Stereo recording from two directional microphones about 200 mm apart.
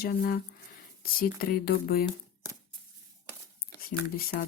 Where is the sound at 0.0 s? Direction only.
50° left (ahead or behind).